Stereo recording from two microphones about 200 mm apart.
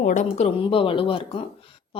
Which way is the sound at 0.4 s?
25° left (ahead or behind).